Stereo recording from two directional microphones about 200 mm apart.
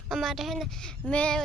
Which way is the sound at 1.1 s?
5° left (ahead or behind).